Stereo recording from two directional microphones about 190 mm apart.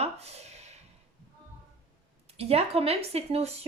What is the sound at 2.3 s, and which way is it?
A woman's voice, 30° right (ahead or behind).